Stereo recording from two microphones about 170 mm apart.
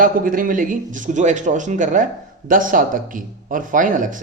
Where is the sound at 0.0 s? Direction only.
50° right (ahead or behind).